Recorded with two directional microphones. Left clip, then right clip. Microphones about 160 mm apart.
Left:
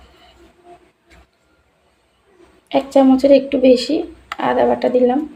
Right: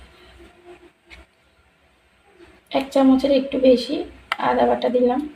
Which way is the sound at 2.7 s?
25° left (ahead or behind).